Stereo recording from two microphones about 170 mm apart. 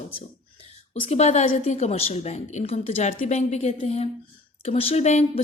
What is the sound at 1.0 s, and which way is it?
A woman's voice, 40° left (ahead or behind).